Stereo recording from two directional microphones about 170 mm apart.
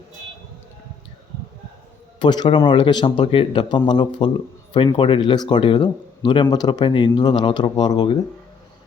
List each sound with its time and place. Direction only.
2.1 s speech: 25° left (ahead or behind)